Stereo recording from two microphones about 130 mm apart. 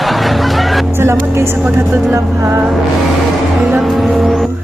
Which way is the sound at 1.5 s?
10° right (ahead or behind).